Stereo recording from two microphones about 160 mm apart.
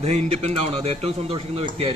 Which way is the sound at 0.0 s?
40° right (ahead or behind).